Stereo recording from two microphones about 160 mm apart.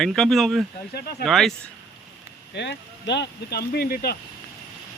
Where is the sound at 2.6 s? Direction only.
90° left; by 4.2 s 70° left (ahead or behind).